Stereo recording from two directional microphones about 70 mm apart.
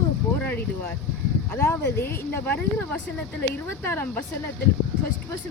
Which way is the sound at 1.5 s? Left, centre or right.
Left.